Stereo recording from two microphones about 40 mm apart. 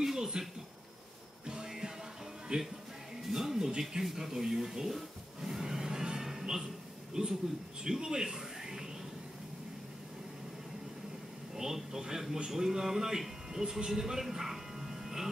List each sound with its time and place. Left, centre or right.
0.0 s a sound: centre
1.5 s music: centre
2.5 s a man's voice: right
3.3 s music: centre
7.2 s a man's voice: right
11.5 s a man's voice: centre